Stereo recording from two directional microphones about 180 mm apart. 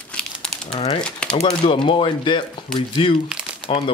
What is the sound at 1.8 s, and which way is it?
Speech, 25° left (ahead or behind).